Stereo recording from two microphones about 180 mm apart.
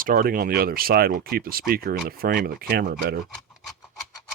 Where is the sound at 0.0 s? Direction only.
50° right (ahead or behind).